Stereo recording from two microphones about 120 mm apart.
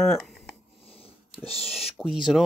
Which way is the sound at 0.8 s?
55° left (ahead or behind).